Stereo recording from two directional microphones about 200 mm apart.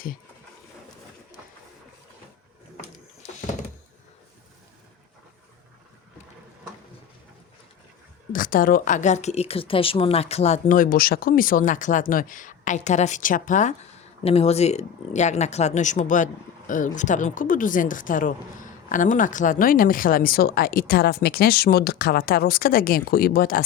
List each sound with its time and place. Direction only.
8.3 s a woman's voice: 45° left (ahead or behind)